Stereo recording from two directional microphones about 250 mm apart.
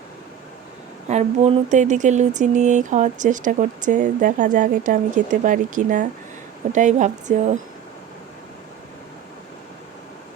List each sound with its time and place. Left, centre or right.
1.0 s a woman's voice: right